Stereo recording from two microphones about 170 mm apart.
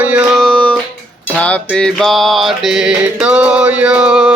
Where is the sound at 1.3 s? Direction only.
10° left (ahead or behind).